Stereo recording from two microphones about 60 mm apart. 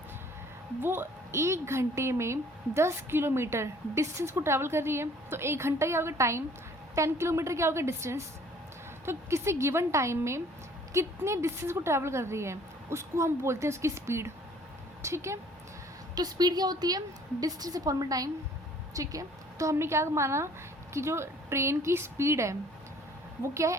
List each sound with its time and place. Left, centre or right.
0.8 s a woman's voice: right
16.1 s a woman's voice: right
18.9 s a woman's voice: right